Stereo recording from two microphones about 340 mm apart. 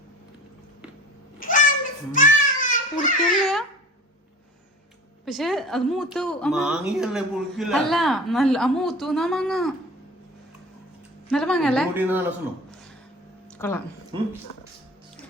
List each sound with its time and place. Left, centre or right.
1.4 s a sound: left
3.4 s babbling: centre
5.2 s speech: centre
11.3 s speech: centre
13.6 s speech: centre